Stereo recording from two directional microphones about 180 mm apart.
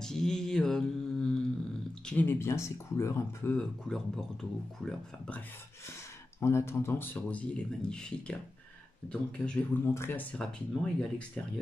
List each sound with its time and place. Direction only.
0.0 s mantra: 5° left (ahead or behind)
2.0 s speech: 10° left (ahead or behind)
3.5 s speech: 5° left (ahead or behind)
6.4 s speech: 15° left (ahead or behind)